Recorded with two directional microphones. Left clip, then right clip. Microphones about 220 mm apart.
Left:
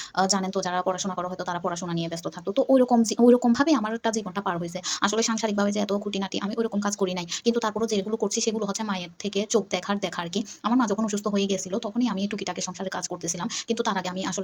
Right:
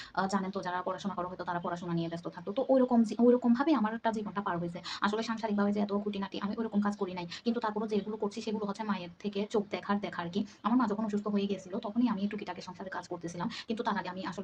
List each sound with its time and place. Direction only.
0.2 s speech: 30° left (ahead or behind)